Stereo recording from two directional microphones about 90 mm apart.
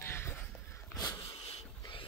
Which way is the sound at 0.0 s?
25° left (ahead or behind).